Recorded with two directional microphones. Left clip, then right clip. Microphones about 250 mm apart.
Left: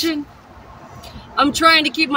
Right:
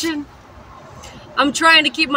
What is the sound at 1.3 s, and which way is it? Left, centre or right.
Speech, centre.